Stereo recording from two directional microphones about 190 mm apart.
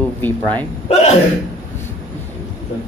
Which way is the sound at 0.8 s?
35° left (ahead or behind).